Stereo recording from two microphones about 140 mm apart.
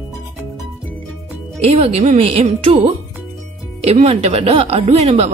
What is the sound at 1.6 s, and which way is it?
Speech, 45° right (ahead or behind).